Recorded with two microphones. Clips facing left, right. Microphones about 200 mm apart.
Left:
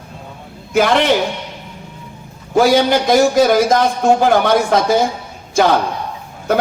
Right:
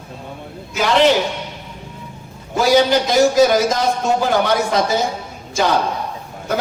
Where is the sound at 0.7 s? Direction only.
55° left (ahead or behind).